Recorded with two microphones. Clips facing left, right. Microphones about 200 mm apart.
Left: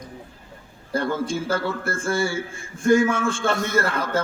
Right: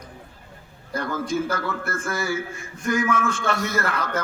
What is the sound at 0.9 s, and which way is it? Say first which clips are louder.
A man's voice: left 1 dB; 30° left (ahead or behind).